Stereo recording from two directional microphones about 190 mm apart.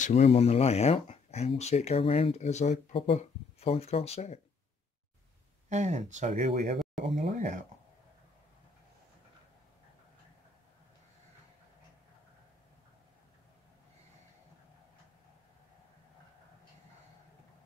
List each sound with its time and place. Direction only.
0.0 s speech: 35° left (ahead or behind)
5.7 s speech: 40° right (ahead or behind)